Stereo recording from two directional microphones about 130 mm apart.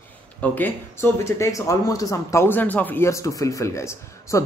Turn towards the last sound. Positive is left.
turn(degrees=20)  # may be behind; listen again after turning